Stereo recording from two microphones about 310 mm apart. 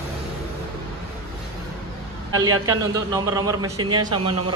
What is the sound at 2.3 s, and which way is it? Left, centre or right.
Speech, right.